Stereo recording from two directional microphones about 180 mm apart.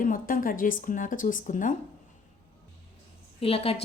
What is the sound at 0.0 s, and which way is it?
Speech, 50° left (ahead or behind).